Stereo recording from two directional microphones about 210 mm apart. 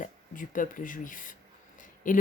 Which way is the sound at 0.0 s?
40° left (ahead or behind).